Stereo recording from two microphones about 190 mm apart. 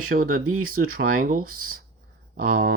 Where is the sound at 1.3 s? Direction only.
50° right (ahead or behind).